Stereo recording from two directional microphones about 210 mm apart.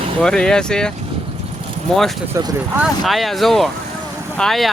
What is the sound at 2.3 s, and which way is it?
Speech, 15° right (ahead or behind).